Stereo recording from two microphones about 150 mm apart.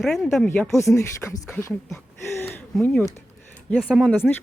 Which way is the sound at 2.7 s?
5° left (ahead or behind).